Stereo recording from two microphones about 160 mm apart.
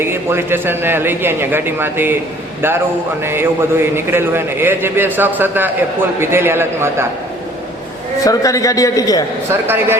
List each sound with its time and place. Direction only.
0.0 s a man's voice: 15° right (ahead or behind)
3.2 s a man's voice: 15° right (ahead or behind)
8.2 s a man's voice: 20° left (ahead or behind)
9.5 s a man's voice: 15° right (ahead or behind)